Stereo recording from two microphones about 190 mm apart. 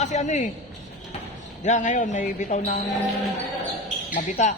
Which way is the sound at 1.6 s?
40° left (ahead or behind).